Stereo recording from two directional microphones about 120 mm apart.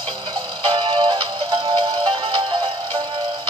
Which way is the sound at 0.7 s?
45° right (ahead or behind).